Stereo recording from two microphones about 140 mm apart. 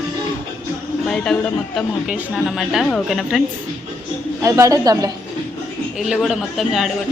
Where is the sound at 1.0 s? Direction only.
5° left (ahead or behind).